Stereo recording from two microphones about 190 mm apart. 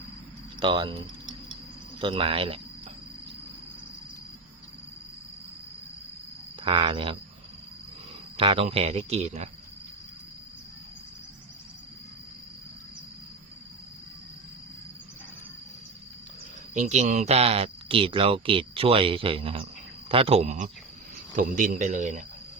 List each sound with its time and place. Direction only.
0.6 s speech: 25° right (ahead or behind)
6.6 s speech: 25° right (ahead or behind)
8.4 s speech: 30° right (ahead or behind)
16.7 s speech: 40° right (ahead or behind)